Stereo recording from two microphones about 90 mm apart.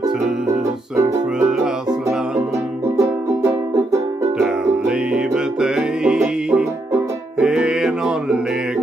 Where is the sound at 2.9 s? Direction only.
40° right (ahead or behind).